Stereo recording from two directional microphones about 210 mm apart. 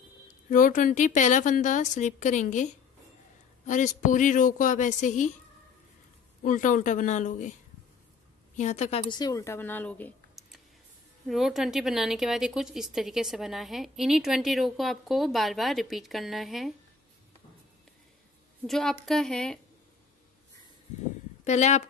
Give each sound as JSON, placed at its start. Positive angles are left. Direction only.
{"t": 0.5, "sound": "a woman's voice", "side_deg": 40}
{"t": 6.4, "sound": "a woman's voice", "side_deg": 40}
{"t": 8.5, "sound": "a woman's voice", "side_deg": 35}
{"t": 18.7, "sound": "a woman's voice", "side_deg": 0}
{"t": 21.5, "sound": "a woman's voice", "side_deg": 35}